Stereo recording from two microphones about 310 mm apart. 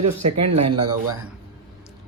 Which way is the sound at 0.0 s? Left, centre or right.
Right.